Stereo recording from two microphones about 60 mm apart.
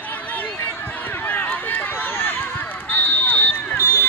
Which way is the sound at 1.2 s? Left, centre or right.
Left.